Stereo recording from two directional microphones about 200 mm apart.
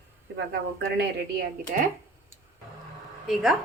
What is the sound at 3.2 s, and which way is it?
Speech, centre (ahead or behind).